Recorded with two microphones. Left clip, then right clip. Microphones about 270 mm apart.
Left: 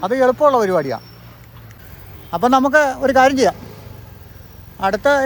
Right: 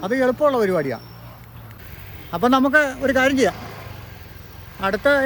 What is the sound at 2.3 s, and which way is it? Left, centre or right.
A man's voice, centre.